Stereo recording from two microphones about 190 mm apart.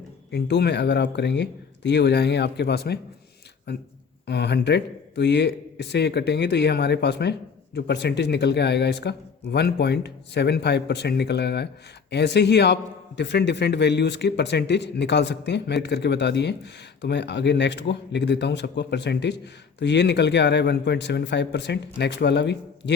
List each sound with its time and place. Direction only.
0.3 s a man's voice: 60° left (ahead or behind)